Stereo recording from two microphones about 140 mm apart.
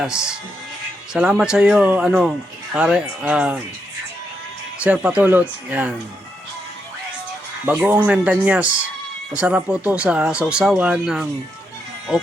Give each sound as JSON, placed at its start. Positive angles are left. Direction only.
{"t": 0.0, "sound": "speech", "side_deg": -5}
{"t": 4.8, "sound": "speech", "side_deg": -10}
{"t": 7.6, "sound": "speech", "side_deg": -10}